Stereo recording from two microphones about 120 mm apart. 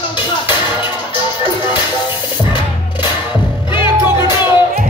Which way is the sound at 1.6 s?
40° left (ahead or behind).